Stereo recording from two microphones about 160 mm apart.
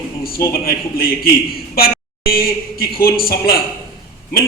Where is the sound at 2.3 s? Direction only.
70° left (ahead or behind).